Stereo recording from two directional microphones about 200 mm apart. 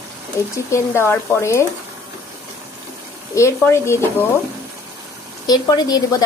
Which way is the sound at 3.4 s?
15° left (ahead or behind).